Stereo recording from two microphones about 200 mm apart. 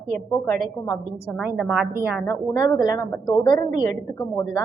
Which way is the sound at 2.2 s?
15° left (ahead or behind).